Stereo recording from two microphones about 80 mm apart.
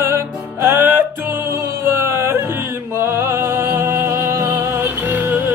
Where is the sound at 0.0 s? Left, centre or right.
Right.